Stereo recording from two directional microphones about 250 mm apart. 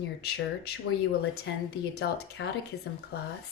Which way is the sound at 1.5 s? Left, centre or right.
Left.